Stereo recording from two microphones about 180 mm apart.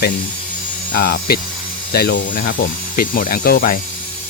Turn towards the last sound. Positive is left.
turn(degrees=55)  # may be behind; listen again after turning